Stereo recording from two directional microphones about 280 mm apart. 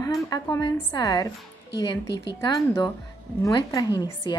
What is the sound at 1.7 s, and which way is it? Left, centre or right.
Speech, left.